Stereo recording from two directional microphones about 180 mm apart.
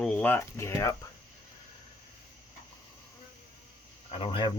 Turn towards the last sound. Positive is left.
turn(degrees=30)  # may be behind; listen again after turning